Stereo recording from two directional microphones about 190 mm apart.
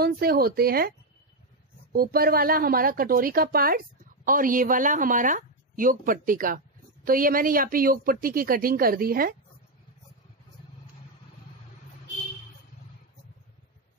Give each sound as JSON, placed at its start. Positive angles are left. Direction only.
{"t": 0.0, "sound": "speech", "side_deg": -55}